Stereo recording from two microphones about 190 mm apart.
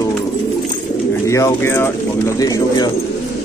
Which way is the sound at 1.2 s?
15° left (ahead or behind).